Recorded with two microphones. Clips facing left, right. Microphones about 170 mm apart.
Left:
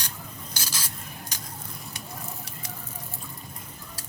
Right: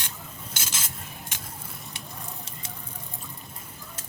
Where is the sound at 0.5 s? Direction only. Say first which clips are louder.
Even; 20° right (ahead or behind).